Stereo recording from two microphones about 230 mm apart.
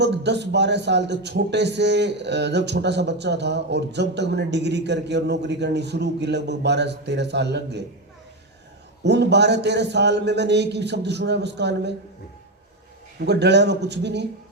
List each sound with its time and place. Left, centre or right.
0.0 s a man's voice: right
9.0 s a man's voice: right
13.1 s a man's voice: right